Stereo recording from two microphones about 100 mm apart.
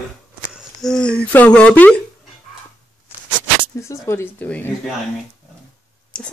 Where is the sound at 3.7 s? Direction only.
30° left (ahead or behind).